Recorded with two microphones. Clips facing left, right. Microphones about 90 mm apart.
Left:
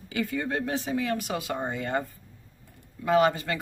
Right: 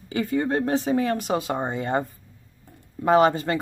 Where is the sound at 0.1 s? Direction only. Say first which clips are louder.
Right 5 dB; 35° right (ahead or behind).